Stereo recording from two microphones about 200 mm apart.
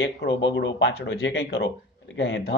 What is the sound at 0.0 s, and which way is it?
Speech, 65° left (ahead or behind).